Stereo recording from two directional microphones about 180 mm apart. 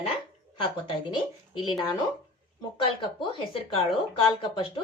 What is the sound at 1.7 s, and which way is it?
Speech, 25° left (ahead or behind).